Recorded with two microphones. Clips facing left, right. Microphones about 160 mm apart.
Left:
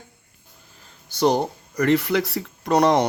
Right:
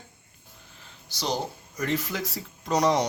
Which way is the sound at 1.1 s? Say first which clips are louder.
Left 10 dB; 60° left (ahead or behind).